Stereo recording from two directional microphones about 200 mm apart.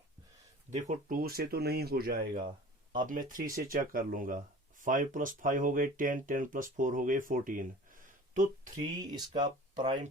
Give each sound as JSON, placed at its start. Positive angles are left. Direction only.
{"t": 0.7, "sound": "speech", "side_deg": -35}
{"t": 8.7, "sound": "speech", "side_deg": -20}